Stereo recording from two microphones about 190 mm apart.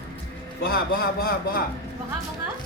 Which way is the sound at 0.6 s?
55° left (ahead or behind).